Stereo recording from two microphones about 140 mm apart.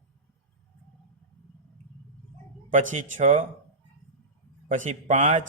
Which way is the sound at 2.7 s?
60° right (ahead or behind).